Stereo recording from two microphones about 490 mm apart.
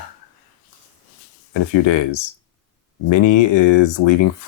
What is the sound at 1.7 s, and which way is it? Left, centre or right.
Speech, left.